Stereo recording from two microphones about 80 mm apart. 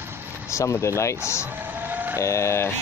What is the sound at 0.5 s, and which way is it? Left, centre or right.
Speech, left.